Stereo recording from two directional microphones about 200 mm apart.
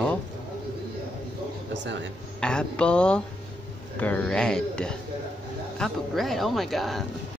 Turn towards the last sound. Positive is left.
turn(degrees=0)  # may be behind; listen again after turning